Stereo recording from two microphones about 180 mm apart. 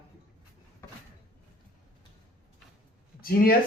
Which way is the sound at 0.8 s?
15° left (ahead or behind).